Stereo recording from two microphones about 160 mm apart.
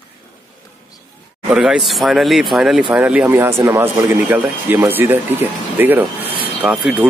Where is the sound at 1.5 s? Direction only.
5° right (ahead or behind).